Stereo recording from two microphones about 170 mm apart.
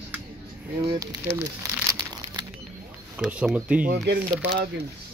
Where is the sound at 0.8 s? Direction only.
20° right (ahead or behind).